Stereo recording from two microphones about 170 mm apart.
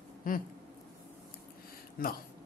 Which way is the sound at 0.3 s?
55° left (ahead or behind).